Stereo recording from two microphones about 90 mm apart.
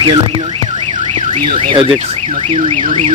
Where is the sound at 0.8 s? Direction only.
85° right.